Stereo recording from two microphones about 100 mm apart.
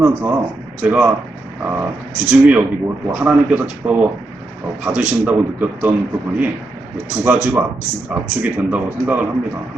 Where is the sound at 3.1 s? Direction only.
15° right (ahead or behind).